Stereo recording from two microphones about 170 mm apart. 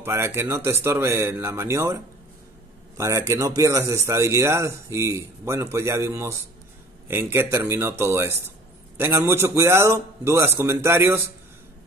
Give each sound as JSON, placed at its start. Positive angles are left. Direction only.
{"t": 0.0, "sound": "speech", "side_deg": -15}
{"t": 3.0, "sound": "speech", "side_deg": -15}